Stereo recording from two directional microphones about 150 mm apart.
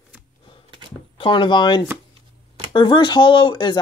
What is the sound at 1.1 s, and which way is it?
Speech, 35° left (ahead or behind).